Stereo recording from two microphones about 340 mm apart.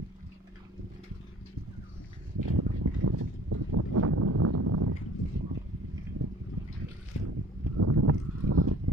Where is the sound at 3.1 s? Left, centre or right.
Right.